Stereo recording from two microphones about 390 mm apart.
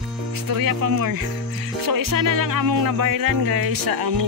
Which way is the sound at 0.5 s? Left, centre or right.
Right.